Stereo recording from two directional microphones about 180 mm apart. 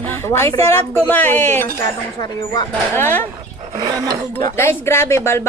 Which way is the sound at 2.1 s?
25° left (ahead or behind).